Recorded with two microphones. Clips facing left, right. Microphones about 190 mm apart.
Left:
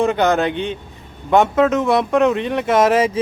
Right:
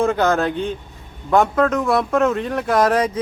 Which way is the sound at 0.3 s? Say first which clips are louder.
Left 1 dB; 20° left (ahead or behind).